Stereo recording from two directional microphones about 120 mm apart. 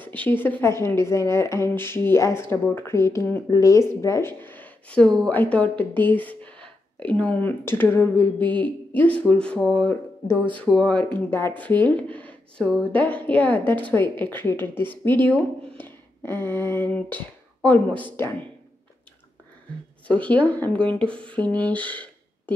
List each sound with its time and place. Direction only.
0.0 s a woman's voice: 15° left (ahead or behind)
11.1 s a woman's voice: 15° left (ahead or behind)
20.1 s a woman's voice: 10° left (ahead or behind)